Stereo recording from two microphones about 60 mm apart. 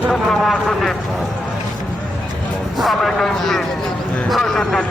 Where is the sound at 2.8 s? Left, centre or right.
Centre.